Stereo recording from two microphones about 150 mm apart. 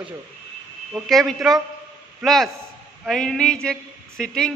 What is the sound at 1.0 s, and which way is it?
A man's voice, centre (ahead or behind).